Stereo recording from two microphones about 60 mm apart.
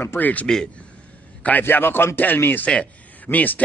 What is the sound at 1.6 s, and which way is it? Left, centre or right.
Speech, left.